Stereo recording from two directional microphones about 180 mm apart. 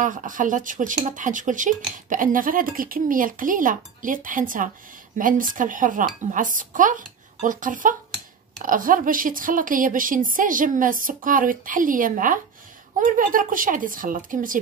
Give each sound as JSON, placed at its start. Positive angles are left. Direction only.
{"t": 0.0, "sound": "speech", "side_deg": -45}